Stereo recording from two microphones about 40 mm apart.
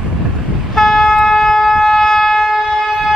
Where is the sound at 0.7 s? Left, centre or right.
Centre.